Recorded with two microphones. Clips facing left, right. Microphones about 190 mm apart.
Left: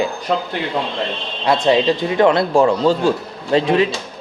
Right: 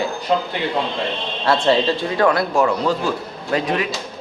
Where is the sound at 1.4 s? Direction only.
15° left (ahead or behind).